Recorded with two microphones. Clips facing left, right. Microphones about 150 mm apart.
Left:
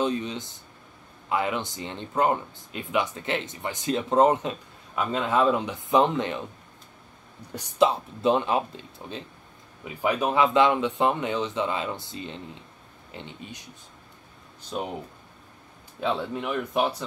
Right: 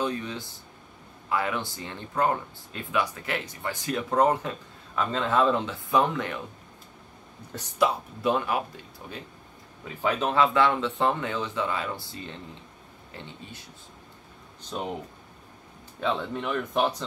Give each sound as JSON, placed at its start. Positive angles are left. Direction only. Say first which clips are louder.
{"t": 0.0, "sound": "speech", "louder": "left 3 dB", "side_deg": 20}
{"t": 7.8, "sound": "speech", "louder": "left 3 dB", "side_deg": 25}
{"t": 14.7, "sound": "speech", "louder": "left 2 dB", "side_deg": 5}
{"t": 16.0, "sound": "speech", "louder": "left 1 dB", "side_deg": 5}